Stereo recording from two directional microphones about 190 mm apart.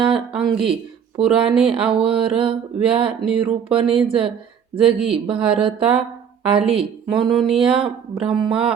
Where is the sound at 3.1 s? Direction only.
5° right (ahead or behind).